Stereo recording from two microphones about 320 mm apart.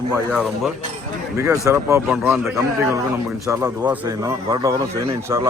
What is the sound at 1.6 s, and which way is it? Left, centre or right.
Speech, centre.